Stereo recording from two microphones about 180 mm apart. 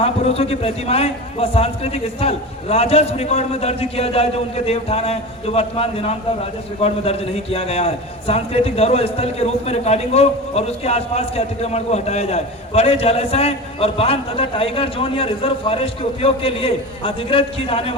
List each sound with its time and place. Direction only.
0.0 s a man's voice: 35° left (ahead or behind)